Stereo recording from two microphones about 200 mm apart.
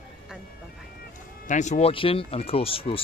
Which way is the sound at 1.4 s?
35° left (ahead or behind).